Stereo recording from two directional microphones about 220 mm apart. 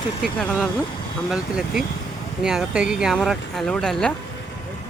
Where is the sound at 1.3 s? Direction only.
Centre (ahead or behind).